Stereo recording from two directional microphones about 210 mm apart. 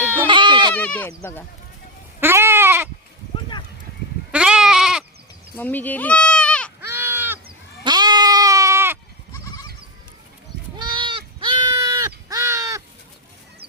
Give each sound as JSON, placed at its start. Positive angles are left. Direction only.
{"t": 0.0, "sound": "goat", "side_deg": -10}
{"t": 0.3, "sound": "goat", "side_deg": -20}
{"t": 0.7, "sound": "speech", "side_deg": 5}
{"t": 2.2, "sound": "goat", "side_deg": -10}
{"t": 4.3, "sound": "goat", "side_deg": -5}
{"t": 5.5, "sound": "speech", "side_deg": 10}
{"t": 6.8, "sound": "crow", "side_deg": -10}
{"t": 7.9, "sound": "goat", "side_deg": -20}
{"t": 9.3, "sound": "goat", "side_deg": 15}
{"t": 10.8, "sound": "sheep", "side_deg": -25}